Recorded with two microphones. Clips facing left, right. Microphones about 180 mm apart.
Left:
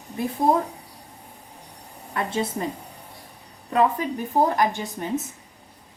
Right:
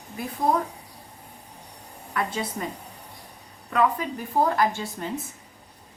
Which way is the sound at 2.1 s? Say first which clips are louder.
Left 3 dB; 25° left (ahead or behind).